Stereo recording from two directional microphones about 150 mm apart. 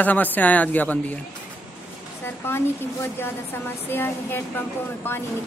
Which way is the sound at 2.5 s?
15° left (ahead or behind).